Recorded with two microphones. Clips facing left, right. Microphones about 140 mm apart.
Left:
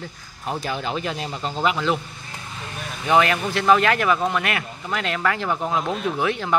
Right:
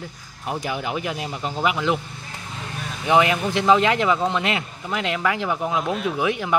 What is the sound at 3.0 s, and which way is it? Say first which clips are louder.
Speech: right 1 dB; 15° right (ahead or behind).